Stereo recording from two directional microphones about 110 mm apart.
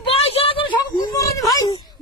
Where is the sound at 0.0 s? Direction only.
60° left (ahead or behind).